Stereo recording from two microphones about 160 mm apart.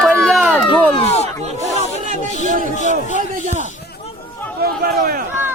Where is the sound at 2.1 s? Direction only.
50° right (ahead or behind).